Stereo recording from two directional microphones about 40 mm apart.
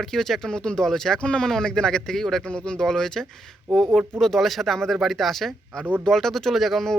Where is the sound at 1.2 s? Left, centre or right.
Left.